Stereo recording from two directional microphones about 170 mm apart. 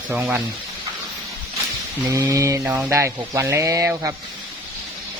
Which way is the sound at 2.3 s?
20° right (ahead or behind).